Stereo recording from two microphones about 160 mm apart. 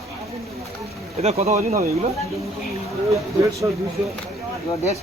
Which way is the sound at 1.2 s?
40° right (ahead or behind).